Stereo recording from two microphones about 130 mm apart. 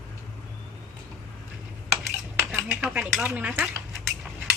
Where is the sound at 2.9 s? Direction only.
10° right (ahead or behind).